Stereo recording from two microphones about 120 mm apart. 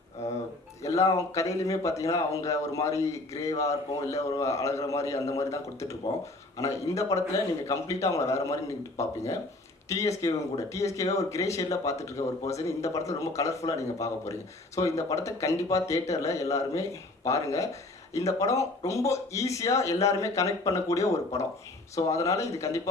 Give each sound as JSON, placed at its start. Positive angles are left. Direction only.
{"t": 0.8, "sound": "speech", "side_deg": 25}